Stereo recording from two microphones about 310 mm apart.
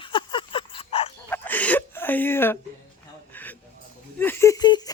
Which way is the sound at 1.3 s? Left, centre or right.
Centre.